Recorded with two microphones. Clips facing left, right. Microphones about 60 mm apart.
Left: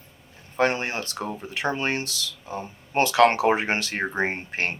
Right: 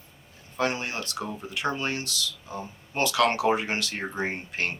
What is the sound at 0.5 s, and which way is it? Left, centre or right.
Speech, left.